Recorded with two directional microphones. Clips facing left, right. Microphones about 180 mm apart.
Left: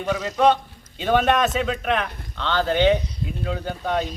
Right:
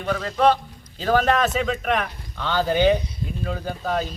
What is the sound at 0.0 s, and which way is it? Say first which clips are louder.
A man's voice: left 1 dB; 5° left (ahead or behind).